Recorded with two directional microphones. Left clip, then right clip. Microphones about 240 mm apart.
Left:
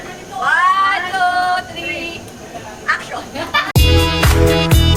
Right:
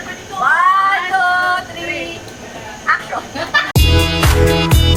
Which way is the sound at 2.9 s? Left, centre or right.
Centre.